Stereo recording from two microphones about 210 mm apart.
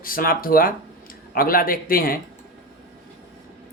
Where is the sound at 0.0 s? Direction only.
45° left (ahead or behind).